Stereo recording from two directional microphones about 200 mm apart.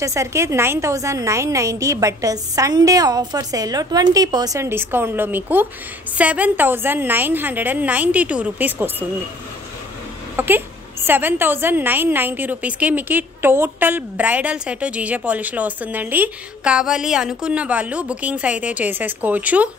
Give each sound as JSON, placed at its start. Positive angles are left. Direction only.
{"t": 0.0, "sound": "a woman's voice", "side_deg": -15}
{"t": 10.3, "sound": "a sound", "side_deg": -10}
{"t": 11.1, "sound": "a woman's voice", "side_deg": -10}